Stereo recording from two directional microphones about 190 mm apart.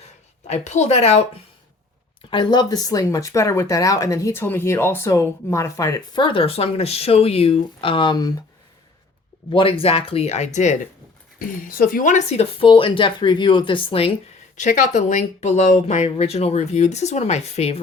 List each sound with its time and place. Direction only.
0.4 s speech: 35° left (ahead or behind)
2.3 s speech: 25° left (ahead or behind)
9.5 s speech: 30° left (ahead or behind)
14.5 s speech: 40° left (ahead or behind)